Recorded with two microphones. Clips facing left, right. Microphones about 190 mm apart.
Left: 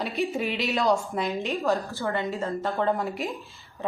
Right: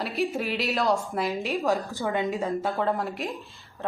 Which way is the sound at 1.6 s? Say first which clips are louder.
Even; 15° right (ahead or behind).